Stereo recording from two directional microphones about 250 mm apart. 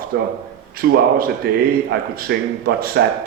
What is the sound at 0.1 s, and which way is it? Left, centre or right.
A man's voice, right.